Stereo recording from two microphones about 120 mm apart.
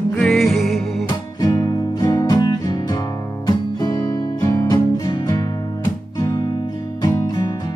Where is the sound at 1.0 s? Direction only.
35° left (ahead or behind).